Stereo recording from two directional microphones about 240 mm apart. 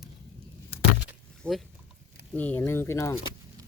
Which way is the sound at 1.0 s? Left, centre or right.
Centre.